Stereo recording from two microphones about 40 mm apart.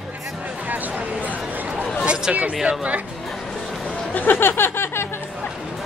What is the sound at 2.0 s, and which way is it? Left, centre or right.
Speech, right.